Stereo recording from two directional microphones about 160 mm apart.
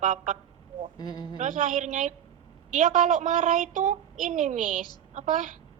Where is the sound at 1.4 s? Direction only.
55° right (ahead or behind).